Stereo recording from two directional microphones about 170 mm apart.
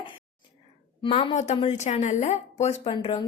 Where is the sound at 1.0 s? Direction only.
30° left (ahead or behind).